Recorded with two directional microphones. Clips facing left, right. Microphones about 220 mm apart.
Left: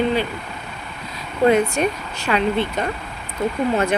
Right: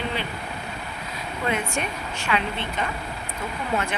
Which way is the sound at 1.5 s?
40° left (ahead or behind).